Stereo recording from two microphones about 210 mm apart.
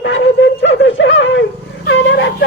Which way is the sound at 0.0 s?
60° left (ahead or behind).